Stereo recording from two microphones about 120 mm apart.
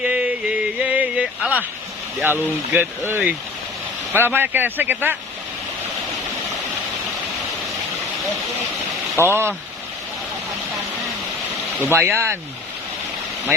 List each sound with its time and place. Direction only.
0.0 s a sound: 10° right (ahead or behind)
2.2 s speech: 15° right (ahead or behind)
9.1 s speech: 20° right (ahead or behind)
11.8 s speech: 20° right (ahead or behind)